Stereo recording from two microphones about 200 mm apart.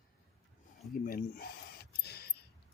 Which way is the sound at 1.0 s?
45° left (ahead or behind).